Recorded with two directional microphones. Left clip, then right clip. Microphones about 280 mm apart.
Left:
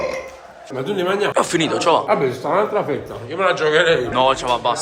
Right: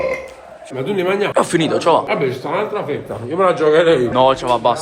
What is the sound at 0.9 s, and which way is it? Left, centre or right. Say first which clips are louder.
Speech: right 2 dB; centre.